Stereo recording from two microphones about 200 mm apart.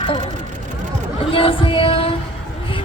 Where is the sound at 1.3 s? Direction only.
25° left (ahead or behind).